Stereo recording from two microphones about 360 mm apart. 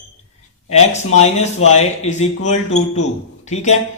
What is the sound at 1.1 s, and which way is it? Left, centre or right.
Speech, centre.